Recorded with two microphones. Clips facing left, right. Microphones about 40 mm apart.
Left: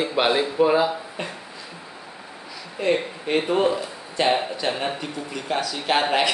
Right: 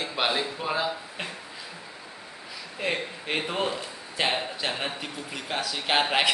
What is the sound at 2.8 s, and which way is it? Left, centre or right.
Speech, centre.